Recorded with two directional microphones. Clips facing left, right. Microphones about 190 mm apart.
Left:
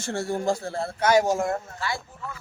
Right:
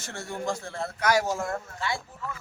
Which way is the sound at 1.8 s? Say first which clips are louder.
Left 1 dB; 25° right (ahead or behind).